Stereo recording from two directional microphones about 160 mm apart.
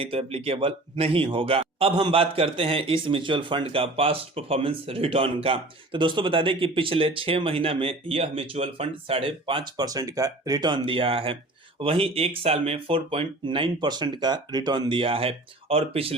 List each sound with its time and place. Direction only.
0.0 s speech: 35° right (ahead or behind)